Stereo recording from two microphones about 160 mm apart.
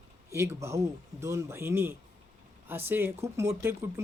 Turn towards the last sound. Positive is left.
turn(degrees=-15)  # may be behind; listen again after turning